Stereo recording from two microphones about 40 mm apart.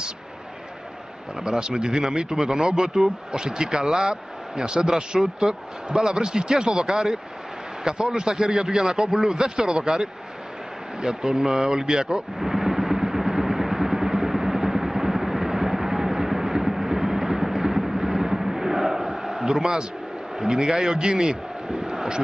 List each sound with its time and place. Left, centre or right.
1.3 s speech: centre
6.9 s speech: centre
7.8 s speech: right
12.4 s vehicle: centre
20.3 s speech: centre
21.7 s a sound: centre